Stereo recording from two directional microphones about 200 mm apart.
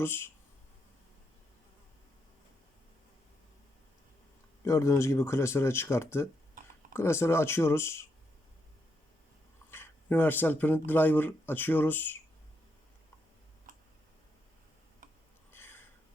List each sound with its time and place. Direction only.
0.0 s speech: 10° left (ahead or behind)
4.6 s speech: 15° left (ahead or behind)
9.6 s speech: 10° left (ahead or behind)
13.7 s tick: 45° right (ahead or behind)
15.5 s a sound: 10° left (ahead or behind)